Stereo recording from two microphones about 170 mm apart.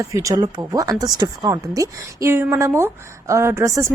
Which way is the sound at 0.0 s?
20° right (ahead or behind).